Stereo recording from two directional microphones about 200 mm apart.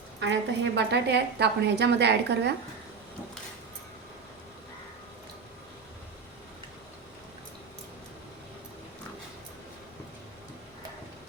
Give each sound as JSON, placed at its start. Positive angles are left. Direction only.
{"t": 0.2, "sound": "a woman's voice", "side_deg": -60}